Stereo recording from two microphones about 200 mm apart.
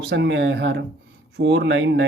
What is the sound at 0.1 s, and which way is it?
Speech, 60° right (ahead or behind).